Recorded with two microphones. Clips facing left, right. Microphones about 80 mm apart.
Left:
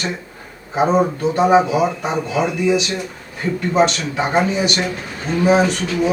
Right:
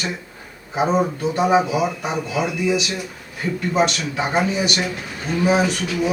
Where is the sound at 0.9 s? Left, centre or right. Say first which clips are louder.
Left 3 dB; left.